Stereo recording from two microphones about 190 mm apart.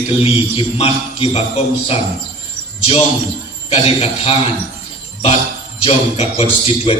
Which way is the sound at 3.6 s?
35° left (ahead or behind).